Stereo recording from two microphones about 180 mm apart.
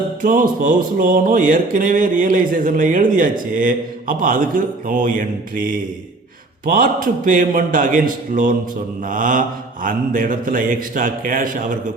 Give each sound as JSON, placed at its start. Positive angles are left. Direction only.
{"t": 0.2, "sound": "mantra", "side_deg": -50}